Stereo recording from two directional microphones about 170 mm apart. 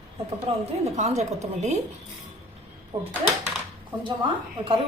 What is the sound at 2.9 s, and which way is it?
Speech, 30° right (ahead or behind).